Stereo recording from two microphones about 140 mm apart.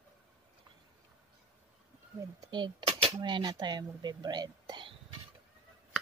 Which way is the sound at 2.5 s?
35° right (ahead or behind).